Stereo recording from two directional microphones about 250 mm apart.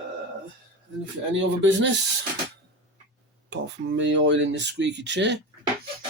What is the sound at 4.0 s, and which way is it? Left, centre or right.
Speech, right.